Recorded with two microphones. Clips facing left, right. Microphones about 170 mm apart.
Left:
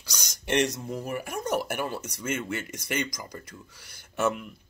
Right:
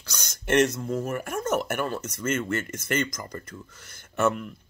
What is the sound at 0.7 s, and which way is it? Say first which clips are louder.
Speech: right 4 dB; 15° left (ahead or behind).